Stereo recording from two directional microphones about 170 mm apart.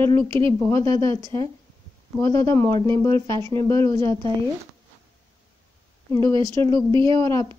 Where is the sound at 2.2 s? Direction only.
30° right (ahead or behind).